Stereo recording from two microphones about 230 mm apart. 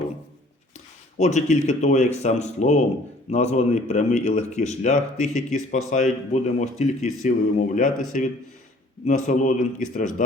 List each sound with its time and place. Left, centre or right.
1.2 s speech: left